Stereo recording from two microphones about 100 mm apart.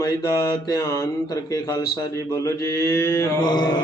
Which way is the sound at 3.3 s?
45° left (ahead or behind).